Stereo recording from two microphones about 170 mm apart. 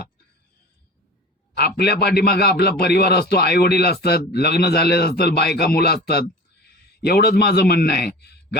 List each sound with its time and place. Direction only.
1.5 s a man's voice: 70° left (ahead or behind)